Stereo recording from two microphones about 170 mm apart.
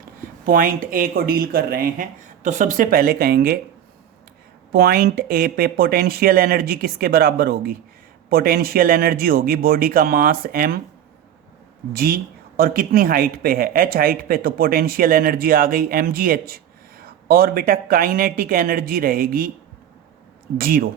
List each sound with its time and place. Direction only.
0.4 s speech: 55° right (ahead or behind)
4.7 s speech: 65° right (ahead or behind)
11.9 s speech: 60° right (ahead or behind)
20.6 s speech: 60° right (ahead or behind)